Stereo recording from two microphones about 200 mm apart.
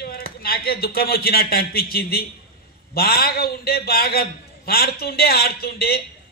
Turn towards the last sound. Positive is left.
turn(degrees=50)  # may be behind; listen again after turning